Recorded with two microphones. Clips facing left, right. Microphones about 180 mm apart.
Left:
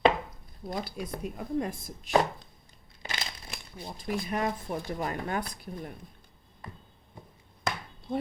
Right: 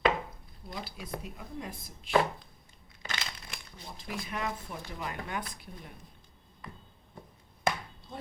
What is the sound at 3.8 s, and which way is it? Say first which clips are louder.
Speech: left 7 dB; 45° left (ahead or behind).